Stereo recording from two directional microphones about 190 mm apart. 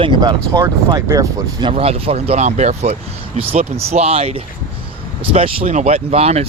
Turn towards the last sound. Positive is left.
turn(degrees=-35)  # may be behind; listen again after turning